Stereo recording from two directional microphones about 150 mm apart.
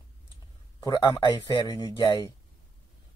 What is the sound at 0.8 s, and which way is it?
A man's voice, 25° left (ahead or behind).